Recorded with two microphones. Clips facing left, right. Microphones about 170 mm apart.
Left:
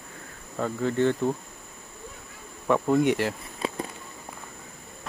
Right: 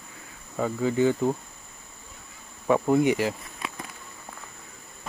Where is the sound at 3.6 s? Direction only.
30° left (ahead or behind).